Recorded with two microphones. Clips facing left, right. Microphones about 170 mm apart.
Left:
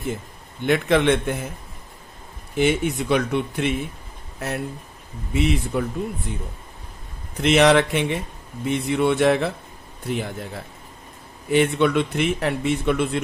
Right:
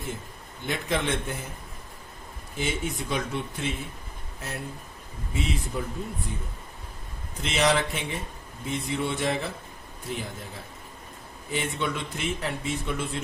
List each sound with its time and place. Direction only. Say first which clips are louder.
0.7 s a man's voice: left 10 dB; 65° left (ahead or behind)
2.6 s a man's voice: left 10 dB; 70° left (ahead or behind)
7.4 s a man's voice: left 9 dB; 70° left (ahead or behind)